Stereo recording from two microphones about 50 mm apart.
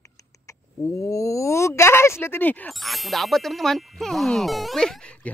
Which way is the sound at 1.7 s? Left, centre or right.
Left.